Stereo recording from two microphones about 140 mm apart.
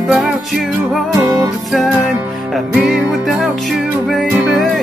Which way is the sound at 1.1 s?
25° right (ahead or behind).